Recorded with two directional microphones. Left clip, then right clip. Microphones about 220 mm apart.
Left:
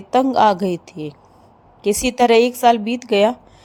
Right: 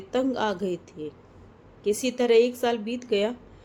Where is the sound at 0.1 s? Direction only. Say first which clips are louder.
Left 12 dB; 35° left (ahead or behind).